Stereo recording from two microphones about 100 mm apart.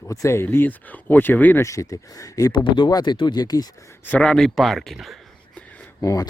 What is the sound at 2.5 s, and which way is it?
Speech, 50° left (ahead or behind).